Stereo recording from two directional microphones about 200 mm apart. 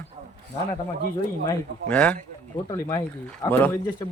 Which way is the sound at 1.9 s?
5° left (ahead or behind).